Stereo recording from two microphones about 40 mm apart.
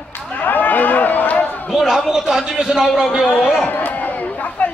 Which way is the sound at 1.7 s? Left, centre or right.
Centre.